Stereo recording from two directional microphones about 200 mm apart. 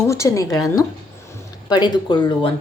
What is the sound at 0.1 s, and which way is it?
Speech, 15° left (ahead or behind).